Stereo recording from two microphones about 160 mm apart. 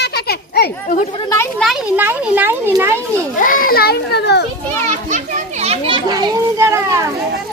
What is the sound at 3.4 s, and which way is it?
A child's voice, 60° left (ahead or behind).